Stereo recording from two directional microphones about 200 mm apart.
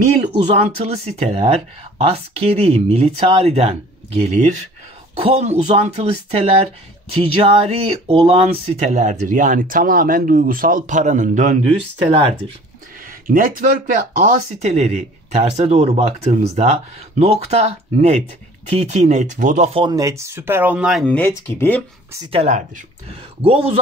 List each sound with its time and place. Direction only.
0.3 s speech: 30° right (ahead or behind)
5.1 s speech: 30° right (ahead or behind)
13.0 s a sound: 45° right (ahead or behind)
14.1 s speech: 40° right (ahead or behind); by 21.8 s 10° left (ahead or behind)
22.2 s speech: 30° right (ahead or behind)